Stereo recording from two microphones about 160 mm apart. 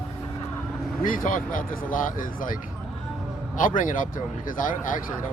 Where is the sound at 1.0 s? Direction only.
60° left (ahead or behind).